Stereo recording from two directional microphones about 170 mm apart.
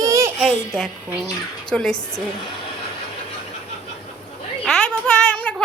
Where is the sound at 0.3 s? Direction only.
Centre (ahead or behind).